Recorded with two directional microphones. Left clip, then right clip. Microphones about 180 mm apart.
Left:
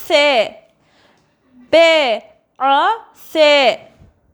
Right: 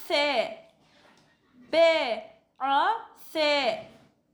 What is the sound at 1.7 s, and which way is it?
A woman's voice, 45° left (ahead or behind).